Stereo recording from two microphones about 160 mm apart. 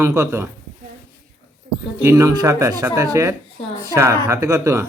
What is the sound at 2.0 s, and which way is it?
Speech, 20° right (ahead or behind).